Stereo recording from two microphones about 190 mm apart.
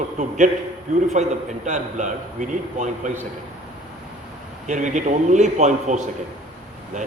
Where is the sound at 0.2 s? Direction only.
40° right (ahead or behind).